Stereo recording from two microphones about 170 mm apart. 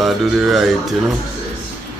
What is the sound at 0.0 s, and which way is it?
Speech, centre (ahead or behind).